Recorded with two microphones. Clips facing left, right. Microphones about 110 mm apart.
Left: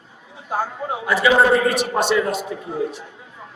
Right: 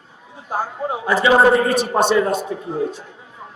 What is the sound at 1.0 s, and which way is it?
A man's voice, 30° right (ahead or behind).